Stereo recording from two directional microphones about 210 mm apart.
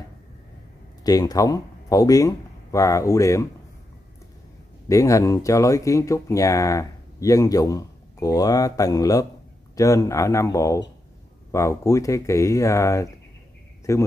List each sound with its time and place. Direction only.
1.0 s speech: 15° left (ahead or behind)
4.8 s speech: 15° left (ahead or behind)